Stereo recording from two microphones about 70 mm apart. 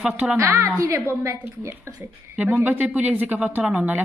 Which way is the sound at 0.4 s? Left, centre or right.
Right.